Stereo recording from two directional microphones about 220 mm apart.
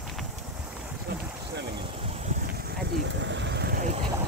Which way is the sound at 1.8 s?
30° right (ahead or behind).